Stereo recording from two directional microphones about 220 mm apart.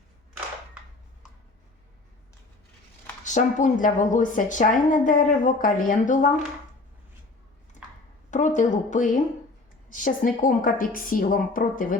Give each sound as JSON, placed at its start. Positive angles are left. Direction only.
{"t": 3.2, "sound": "a woman's voice", "side_deg": 35}
{"t": 8.3, "sound": "a woman's voice", "side_deg": 35}